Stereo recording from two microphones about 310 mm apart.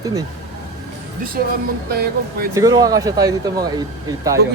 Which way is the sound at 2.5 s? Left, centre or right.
Centre.